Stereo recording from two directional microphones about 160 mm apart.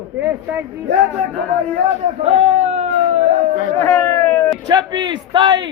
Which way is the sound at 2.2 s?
40° right (ahead or behind).